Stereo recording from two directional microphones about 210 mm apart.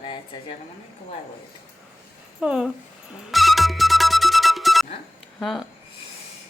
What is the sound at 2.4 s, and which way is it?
Speech, 5° right (ahead or behind).